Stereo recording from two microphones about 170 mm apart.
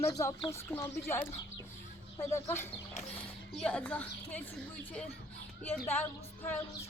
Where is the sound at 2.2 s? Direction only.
15° left (ahead or behind).